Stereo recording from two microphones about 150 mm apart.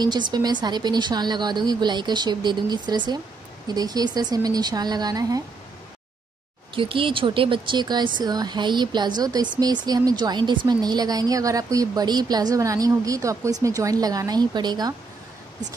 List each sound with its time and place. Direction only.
0.0 s a woman's voice: 30° right (ahead or behind)
6.7 s a woman's voice: 35° right (ahead or behind)